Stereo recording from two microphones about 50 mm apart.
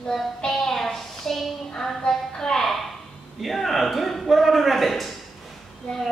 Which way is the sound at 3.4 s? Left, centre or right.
Centre.